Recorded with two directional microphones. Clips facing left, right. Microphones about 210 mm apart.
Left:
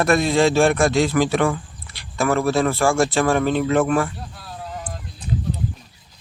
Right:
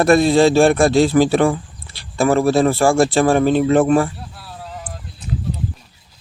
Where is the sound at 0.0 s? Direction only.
35° right (ahead or behind).